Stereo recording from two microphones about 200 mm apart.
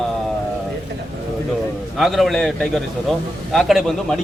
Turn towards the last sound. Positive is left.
turn(degrees=0)  # may be behind; listen again after turning